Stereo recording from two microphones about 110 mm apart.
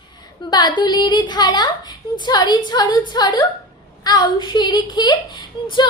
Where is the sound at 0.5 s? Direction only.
40° left (ahead or behind).